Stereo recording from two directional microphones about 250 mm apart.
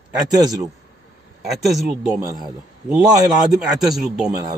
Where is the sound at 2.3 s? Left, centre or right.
Centre.